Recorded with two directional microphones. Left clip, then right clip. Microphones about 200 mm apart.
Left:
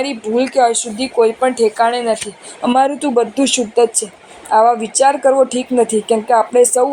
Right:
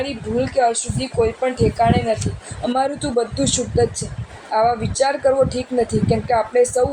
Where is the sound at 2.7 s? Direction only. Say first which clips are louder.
Left 7 dB; 20° left (ahead or behind).